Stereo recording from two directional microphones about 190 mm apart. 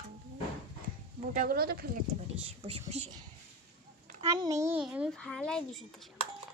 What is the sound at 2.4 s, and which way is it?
Speech, 35° right (ahead or behind).